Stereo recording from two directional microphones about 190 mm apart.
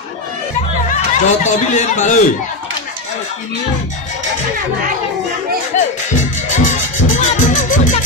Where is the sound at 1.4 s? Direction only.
40° left (ahead or behind).